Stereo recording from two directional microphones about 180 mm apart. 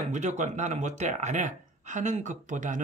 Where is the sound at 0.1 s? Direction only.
40° right (ahead or behind).